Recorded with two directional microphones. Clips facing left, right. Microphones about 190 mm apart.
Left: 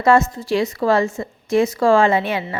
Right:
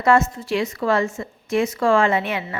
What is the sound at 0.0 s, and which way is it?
A woman's voice, 35° left (ahead or behind).